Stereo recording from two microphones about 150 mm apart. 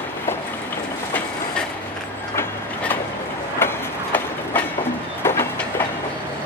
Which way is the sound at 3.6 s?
15° left (ahead or behind).